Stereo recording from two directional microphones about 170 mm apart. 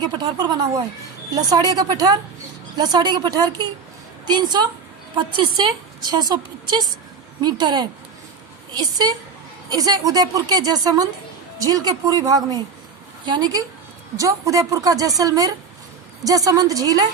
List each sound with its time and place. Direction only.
0.0 s a woman's voice: 25° right (ahead or behind)